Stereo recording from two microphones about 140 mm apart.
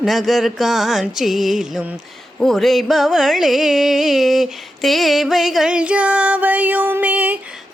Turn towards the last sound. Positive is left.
turn(degrees=-10)  # may be behind; listen again after turning